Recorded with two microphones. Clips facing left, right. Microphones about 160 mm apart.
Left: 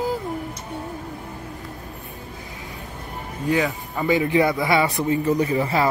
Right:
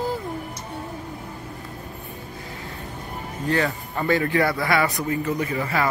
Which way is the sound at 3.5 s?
10° left (ahead or behind).